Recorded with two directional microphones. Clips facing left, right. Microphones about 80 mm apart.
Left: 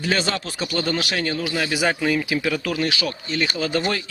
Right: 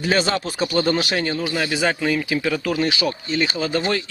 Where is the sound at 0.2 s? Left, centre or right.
Centre.